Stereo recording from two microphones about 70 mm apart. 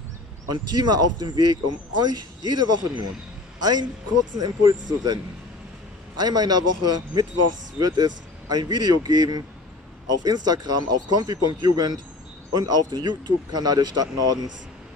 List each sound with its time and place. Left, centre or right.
0.5 s a man's voice: right
6.1 s speech: right